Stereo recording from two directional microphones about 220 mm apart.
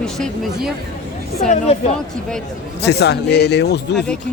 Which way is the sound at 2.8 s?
50° left (ahead or behind).